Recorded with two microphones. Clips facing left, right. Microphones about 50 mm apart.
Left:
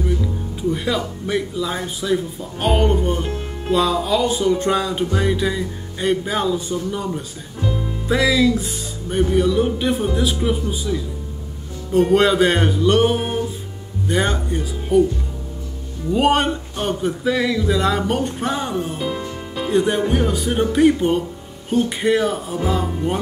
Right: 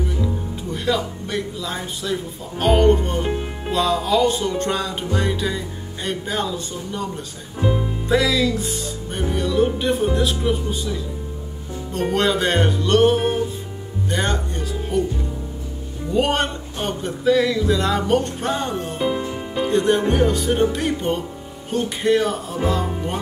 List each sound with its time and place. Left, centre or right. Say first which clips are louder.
0.6 s music: left 2 dB; centre
3.3 s speech: right 1 dB; centre
3.7 s music: left 1 dB; centre
7.6 s speech: right 3 dB; centre
8.1 s music: left 2 dB; centre
16.1 s music: left 3 dB; centre
18.9 s music: right 3 dB; centre
19.7 s music: left 1 dB; centre